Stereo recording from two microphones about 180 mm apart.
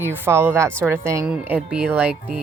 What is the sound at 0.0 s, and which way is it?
Speech, 10° right (ahead or behind).